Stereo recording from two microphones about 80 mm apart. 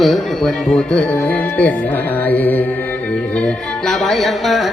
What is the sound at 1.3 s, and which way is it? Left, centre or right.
Speech, centre.